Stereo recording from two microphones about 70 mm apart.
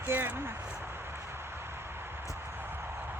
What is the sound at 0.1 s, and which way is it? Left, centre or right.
Speech, right.